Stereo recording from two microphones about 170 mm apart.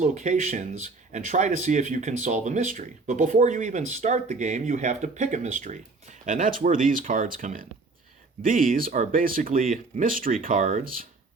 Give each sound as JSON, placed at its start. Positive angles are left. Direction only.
{"t": 0.0, "sound": "speech", "side_deg": -45}